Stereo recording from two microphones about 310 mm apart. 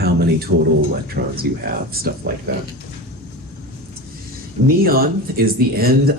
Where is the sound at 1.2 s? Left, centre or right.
Right.